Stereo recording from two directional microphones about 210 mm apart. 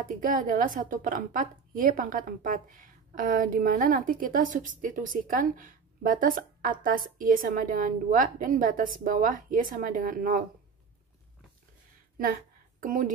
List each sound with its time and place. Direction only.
0.0 s a woman's voice: 40° right (ahead or behind)
12.8 s a woman's voice: 40° right (ahead or behind)